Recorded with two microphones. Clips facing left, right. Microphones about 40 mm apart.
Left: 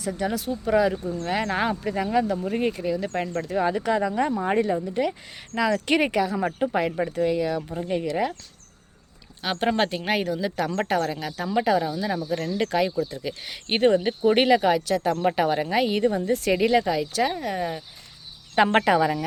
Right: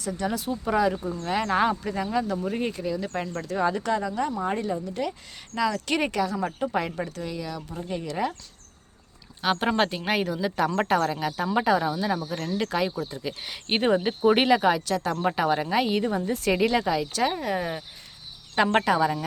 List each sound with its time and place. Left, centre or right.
0.0 s speech: centre
7.2 s speech: left
9.4 s speech: centre
12.5 s speech: centre
18.5 s speech: centre